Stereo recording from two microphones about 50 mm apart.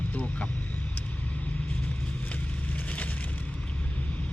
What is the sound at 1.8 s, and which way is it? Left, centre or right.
Vehicle, left.